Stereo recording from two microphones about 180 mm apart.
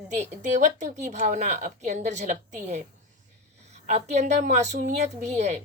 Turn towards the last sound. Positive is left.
turn(degrees=-40)  # may be behind; listen again after turning